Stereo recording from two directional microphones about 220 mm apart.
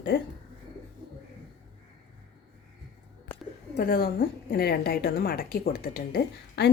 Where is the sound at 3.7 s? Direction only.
40° left (ahead or behind).